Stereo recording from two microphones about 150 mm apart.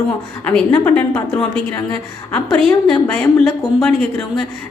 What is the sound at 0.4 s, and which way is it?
A woman's voice, 10° left (ahead or behind).